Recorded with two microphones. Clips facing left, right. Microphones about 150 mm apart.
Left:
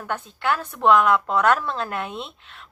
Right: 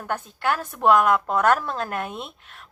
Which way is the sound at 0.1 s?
40° right (ahead or behind).